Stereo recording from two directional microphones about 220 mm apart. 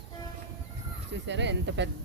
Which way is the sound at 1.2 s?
55° right (ahead or behind).